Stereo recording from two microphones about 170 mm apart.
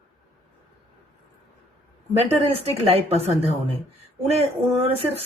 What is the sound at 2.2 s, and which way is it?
Speech, 35° right (ahead or behind).